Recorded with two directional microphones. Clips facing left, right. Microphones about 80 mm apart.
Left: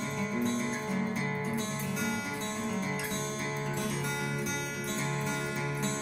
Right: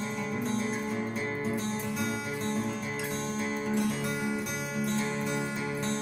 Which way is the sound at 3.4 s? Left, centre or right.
Centre.